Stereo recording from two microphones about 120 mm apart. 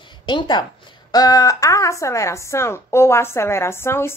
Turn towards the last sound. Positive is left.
turn(degrees=20)  # may be behind; listen again after turning